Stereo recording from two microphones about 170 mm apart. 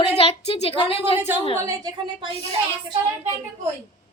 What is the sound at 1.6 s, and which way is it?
Speech, 15° right (ahead or behind).